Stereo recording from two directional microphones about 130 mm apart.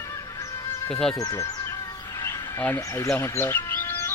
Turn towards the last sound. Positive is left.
turn(degrees=15)  # may be behind; listen again after turning